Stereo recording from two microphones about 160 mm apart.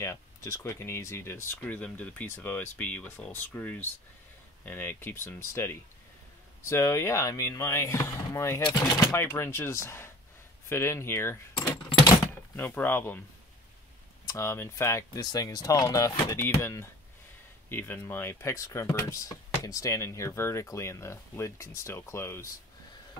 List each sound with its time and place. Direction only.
0.0 s a sound: 20° left (ahead or behind)
0.7 s speech: 15° left (ahead or behind)
14.2 s speech: 20° left (ahead or behind)